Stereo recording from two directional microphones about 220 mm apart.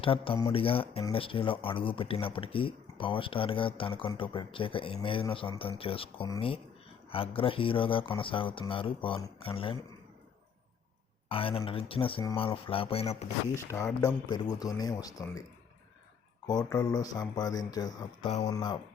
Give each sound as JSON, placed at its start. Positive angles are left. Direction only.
{"t": 0.0, "sound": "speech", "side_deg": 25}
{"t": 11.3, "sound": "speech", "side_deg": 25}
{"t": 13.6, "sound": "speech", "side_deg": 15}
{"t": 16.8, "sound": "speech", "side_deg": 15}